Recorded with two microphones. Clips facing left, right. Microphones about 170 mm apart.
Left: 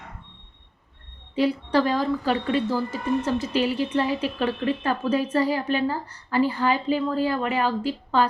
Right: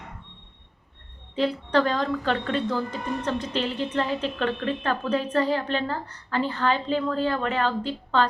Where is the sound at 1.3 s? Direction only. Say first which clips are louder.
Left 1 dB; 10° left (ahead or behind).